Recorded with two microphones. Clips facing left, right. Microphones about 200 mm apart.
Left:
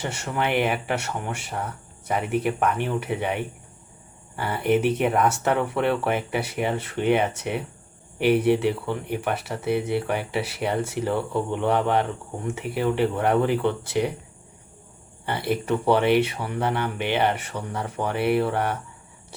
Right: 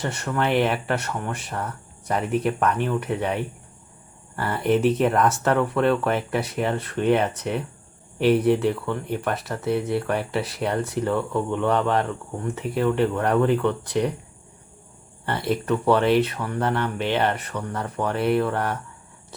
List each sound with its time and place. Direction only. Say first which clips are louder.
0.3 s speech: right 2 dB; 5° left (ahead or behind)
15.7 s speech: right 1 dB; 10° left (ahead or behind)